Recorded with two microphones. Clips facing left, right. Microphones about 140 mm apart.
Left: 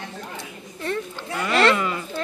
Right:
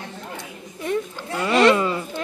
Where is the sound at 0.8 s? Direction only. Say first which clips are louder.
Right 3 dB; 10° right (ahead or behind).